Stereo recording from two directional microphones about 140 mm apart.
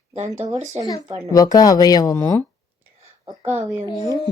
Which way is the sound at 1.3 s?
25° left (ahead or behind).